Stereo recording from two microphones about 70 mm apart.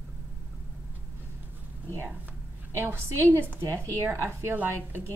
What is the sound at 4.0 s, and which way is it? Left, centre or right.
A woman's voice, right.